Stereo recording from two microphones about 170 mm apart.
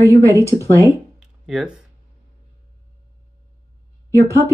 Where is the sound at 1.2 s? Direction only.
Centre (ahead or behind).